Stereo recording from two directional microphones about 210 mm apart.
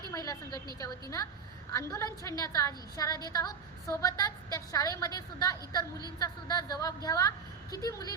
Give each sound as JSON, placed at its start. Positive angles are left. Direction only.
{"t": 0.1, "sound": "a woman's voice", "side_deg": 15}
{"t": 1.7, "sound": "a woman's voice", "side_deg": 15}